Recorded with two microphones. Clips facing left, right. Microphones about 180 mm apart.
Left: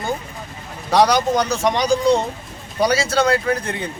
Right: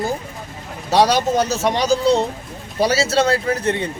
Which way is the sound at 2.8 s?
30° right (ahead or behind).